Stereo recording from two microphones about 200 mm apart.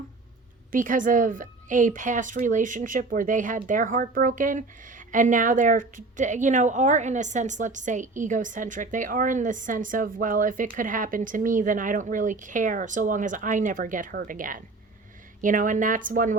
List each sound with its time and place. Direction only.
0.7 s a woman's voice: 40° right (ahead or behind)